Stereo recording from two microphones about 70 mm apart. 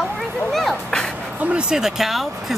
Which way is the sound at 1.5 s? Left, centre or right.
Centre.